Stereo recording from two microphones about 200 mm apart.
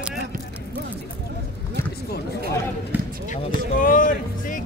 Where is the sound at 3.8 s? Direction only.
40° left (ahead or behind).